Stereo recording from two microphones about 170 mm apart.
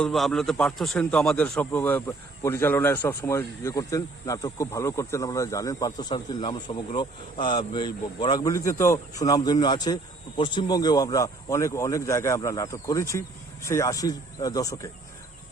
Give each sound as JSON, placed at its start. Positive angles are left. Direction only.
{"t": 0.0, "sound": "a man's voice", "side_deg": 5}